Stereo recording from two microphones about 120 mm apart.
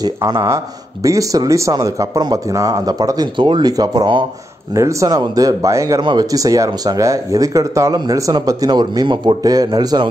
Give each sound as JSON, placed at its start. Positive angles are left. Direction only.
{"t": 0.0, "sound": "speech", "side_deg": -30}